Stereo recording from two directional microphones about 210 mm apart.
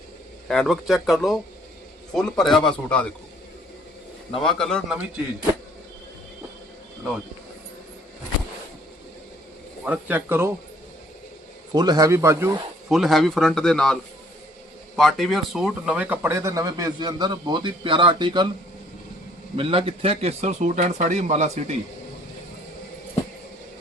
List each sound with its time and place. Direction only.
0.4 s a man's voice: centre (ahead or behind)
4.4 s a man's voice: centre (ahead or behind)
9.8 s speech: 5° right (ahead or behind)
11.7 s speech: 20° right (ahead or behind)
12.9 s a man's voice: centre (ahead or behind); by 18.4 s 20° right (ahead or behind)
19.5 s speech: 25° right (ahead or behind)